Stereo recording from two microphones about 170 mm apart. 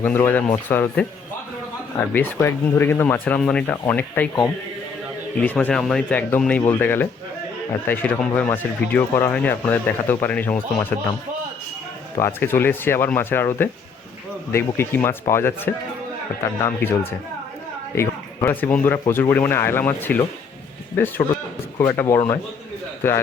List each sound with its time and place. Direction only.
0.0 s speech: 10° left (ahead or behind)
12.1 s speech: 15° left (ahead or behind)
21.8 s speech: 15° left (ahead or behind)